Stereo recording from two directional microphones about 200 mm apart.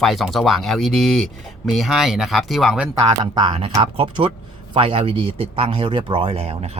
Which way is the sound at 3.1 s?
25° right (ahead or behind).